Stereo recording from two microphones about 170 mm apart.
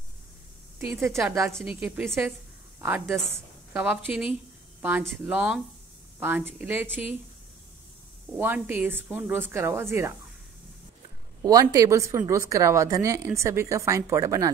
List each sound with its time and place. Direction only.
0.7 s a woman's voice: 15° right (ahead or behind)
8.4 s a woman's voice: 10° right (ahead or behind)
11.4 s a woman's voice: 20° right (ahead or behind)